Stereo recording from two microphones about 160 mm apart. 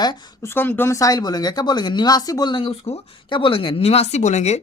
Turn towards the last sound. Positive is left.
turn(degrees=45)  # may be behind; listen again after turning